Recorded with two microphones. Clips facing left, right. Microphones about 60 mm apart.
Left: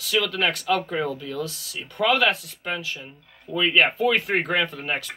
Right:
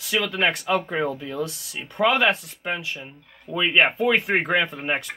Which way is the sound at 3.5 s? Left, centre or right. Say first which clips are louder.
Even; centre.